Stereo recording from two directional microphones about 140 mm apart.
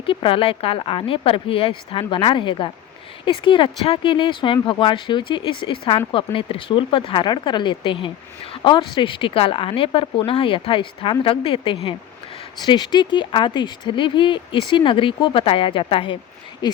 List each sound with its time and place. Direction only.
0.0 s speech: 40° left (ahead or behind)